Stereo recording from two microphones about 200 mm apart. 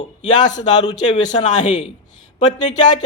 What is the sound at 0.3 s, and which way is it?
Speech, 40° left (ahead or behind).